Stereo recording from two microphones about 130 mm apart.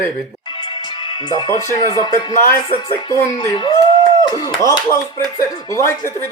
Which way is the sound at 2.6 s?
40° left (ahead or behind).